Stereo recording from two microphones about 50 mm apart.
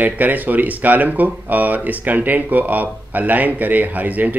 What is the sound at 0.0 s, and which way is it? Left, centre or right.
Speech, right.